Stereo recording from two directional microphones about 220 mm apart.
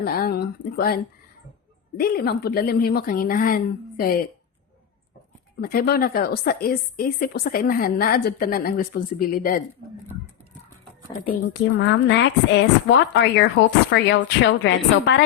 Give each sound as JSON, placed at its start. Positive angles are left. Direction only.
{"t": 0.0, "sound": "a woman's voice", "side_deg": 45}
{"t": 5.5, "sound": "a woman's voice", "side_deg": 45}
{"t": 11.8, "sound": "a woman's voice", "side_deg": 55}